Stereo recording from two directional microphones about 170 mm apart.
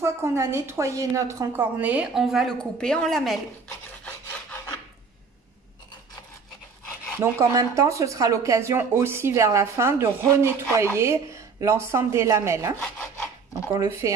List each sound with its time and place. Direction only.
0.0 s speech: 15° right (ahead or behind); by 3.3 s centre (ahead or behind)
7.2 s speech: 15° right (ahead or behind)
13.7 s speech: 15° right (ahead or behind)